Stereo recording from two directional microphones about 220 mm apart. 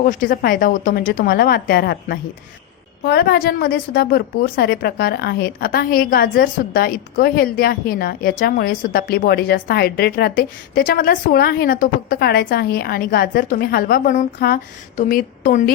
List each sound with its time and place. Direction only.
0.0 s a woman's voice: 35° left (ahead or behind)